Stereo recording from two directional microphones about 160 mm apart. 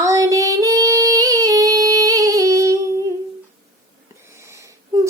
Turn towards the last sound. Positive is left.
turn(degrees=-25)  # may be behind; listen again after turning